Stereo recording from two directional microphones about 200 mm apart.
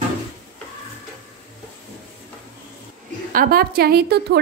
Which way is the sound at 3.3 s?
50° right (ahead or behind).